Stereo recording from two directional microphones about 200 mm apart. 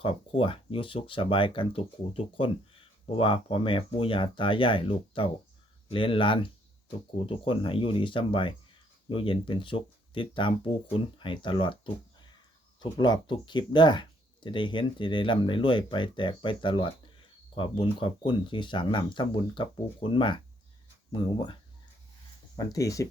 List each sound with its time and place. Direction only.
0.0 s speech: 25° left (ahead or behind)
12.8 s speech: 20° left (ahead or behind)
22.5 s speech: 15° left (ahead or behind)